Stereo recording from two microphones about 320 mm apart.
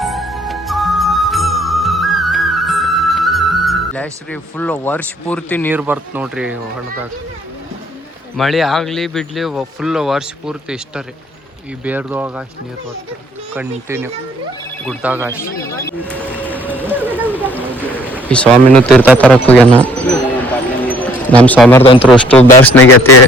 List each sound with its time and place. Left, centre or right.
0.0 s music: centre
5.7 s speech: centre
8.4 s speech: centre
13.5 s speech: centre
15.7 s speech: centre
16.4 s music: centre
16.7 s a sound: centre
20.9 s speech: centre
22.8 s speech: left